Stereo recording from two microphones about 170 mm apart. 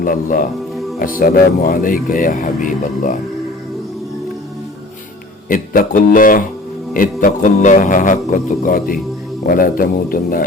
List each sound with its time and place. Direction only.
0.0 s speech: 55° left (ahead or behind)
5.5 s speech: 50° left (ahead or behind)